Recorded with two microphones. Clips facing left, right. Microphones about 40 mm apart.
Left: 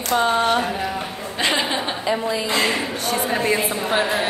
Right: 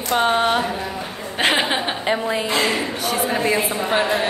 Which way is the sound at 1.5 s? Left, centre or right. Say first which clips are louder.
Right 2 dB; right.